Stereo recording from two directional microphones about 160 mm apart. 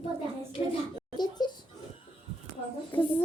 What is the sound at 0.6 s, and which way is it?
Speech, 40° left (ahead or behind).